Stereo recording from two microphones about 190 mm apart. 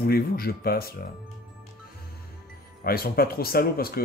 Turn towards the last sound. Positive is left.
turn(degrees=50)  # may be behind; listen again after turning